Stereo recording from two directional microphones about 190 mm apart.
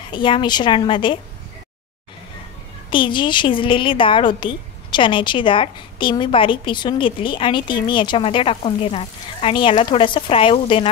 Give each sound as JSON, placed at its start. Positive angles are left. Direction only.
{"t": 0.1, "sound": "a woman's voice", "side_deg": 25}
{"t": 2.9, "sound": "a woman's voice", "side_deg": 25}